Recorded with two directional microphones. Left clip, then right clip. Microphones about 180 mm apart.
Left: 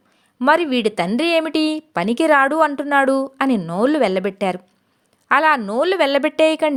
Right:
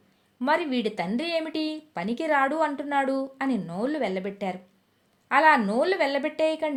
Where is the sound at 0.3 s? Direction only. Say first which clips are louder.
Left 9 dB; 40° left (ahead or behind).